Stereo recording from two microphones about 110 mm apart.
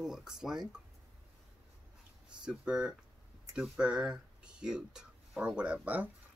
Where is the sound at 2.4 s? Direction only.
10° right (ahead or behind).